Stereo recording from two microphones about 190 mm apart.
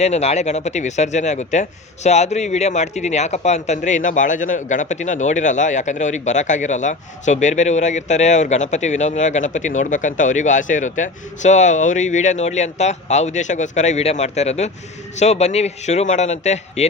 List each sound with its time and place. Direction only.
0.0 s a man's voice: 35° left (ahead or behind)